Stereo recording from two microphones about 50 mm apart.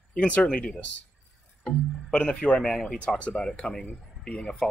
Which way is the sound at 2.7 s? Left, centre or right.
Centre.